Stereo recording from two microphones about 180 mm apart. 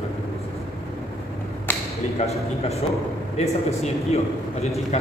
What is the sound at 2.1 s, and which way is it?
A man's voice, 35° left (ahead or behind).